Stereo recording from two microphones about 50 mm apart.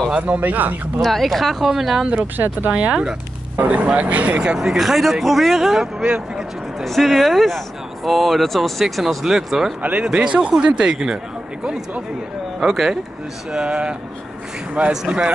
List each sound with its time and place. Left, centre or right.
0.4 s speech: right
1.0 s speech: centre
2.3 s speech: right
2.7 s speech: right
3.5 s speech: right
4.6 s speech: centre
9.8 s speech: right
12.5 s speech: centre
13.5 s speech: centre
15.0 s speech: right